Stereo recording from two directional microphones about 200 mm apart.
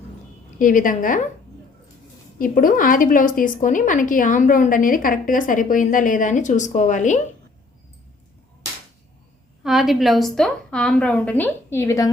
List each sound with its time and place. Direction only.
0.6 s a woman's voice: 40° left (ahead or behind)
2.4 s a woman's voice: 45° left (ahead or behind)
9.6 s a woman's voice: centre (ahead or behind); by 12.1 s 15° left (ahead or behind)